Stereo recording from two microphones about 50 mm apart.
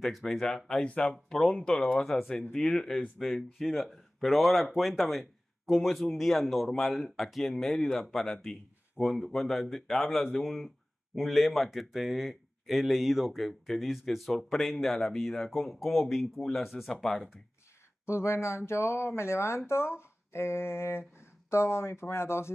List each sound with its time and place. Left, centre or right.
0.0 s speech: centre
0.4 s speech: centre
0.8 s speech: left
1.1 s speech: centre
2.0 s speech: centre
9.0 s speech: centre
9.3 s speech: centre
18.0 s speech: left